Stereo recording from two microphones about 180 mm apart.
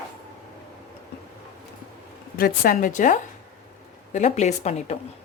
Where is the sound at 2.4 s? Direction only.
50° left (ahead or behind).